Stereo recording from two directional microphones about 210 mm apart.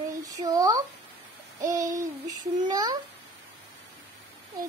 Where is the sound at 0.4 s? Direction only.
15° right (ahead or behind).